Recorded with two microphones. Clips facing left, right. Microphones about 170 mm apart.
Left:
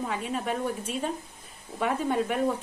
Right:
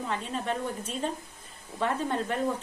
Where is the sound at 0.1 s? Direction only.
10° left (ahead or behind).